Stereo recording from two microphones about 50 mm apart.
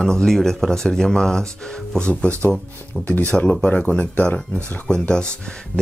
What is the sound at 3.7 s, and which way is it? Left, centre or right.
Speech, left.